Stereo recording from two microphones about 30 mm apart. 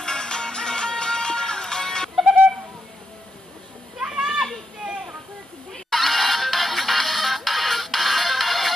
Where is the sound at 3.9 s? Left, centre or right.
Right.